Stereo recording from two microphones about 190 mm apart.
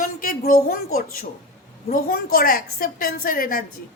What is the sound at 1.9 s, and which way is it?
A woman's voice, 50° left (ahead or behind).